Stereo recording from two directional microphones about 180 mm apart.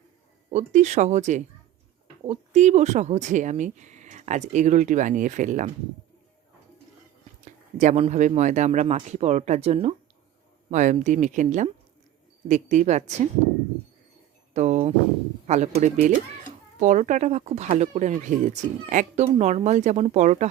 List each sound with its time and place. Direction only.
0.5 s speech: 40° right (ahead or behind)
7.4 s speech: 40° right (ahead or behind)
14.5 s speech: 40° right (ahead or behind)